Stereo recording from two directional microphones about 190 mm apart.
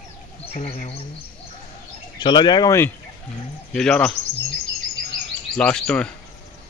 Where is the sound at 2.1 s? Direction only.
25° left (ahead or behind).